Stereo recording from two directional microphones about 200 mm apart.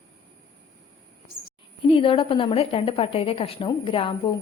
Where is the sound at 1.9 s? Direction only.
25° left (ahead or behind).